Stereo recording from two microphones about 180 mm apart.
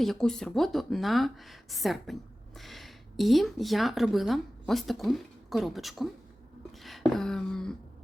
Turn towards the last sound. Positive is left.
turn(degrees=5)  # may be behind; listen again after turning